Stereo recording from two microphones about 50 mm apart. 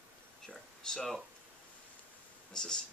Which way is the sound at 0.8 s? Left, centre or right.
Centre.